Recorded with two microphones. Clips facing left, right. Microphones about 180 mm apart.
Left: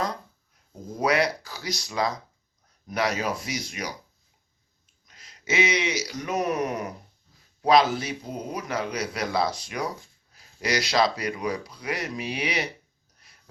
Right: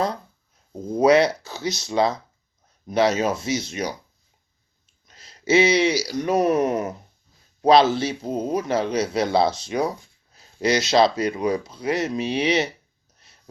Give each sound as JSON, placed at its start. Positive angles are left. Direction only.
{"t": 0.9, "sound": "a man's voice", "side_deg": -25}
{"t": 5.0, "sound": "a man's voice", "side_deg": -30}
{"t": 13.1, "sound": "a sound", "side_deg": -25}